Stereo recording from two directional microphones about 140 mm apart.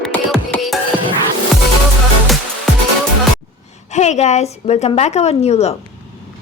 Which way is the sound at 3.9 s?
55° left (ahead or behind).